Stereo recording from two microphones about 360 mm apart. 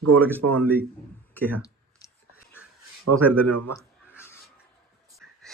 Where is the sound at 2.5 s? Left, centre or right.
Right.